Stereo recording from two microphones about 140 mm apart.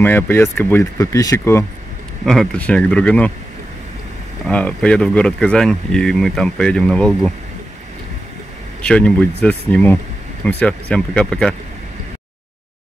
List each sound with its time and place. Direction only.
0.0 s speech: 15° left (ahead or behind)
2.2 s speech: 5° left (ahead or behind)
4.5 s speech: 10° left (ahead or behind)
8.8 s speech: 10° left (ahead or behind)